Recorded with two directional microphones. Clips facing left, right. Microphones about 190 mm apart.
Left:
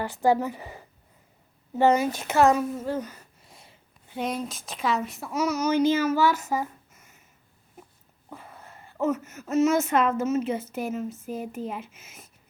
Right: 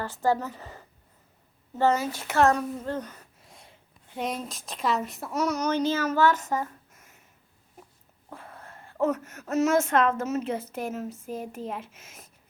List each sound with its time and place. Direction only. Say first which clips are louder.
0.0 s speech: left 3 dB; 15° left (ahead or behind)
2.4 s a woman's voice: left 2 dB; 5° left (ahead or behind)
8.3 s speech: even; centre (ahead or behind)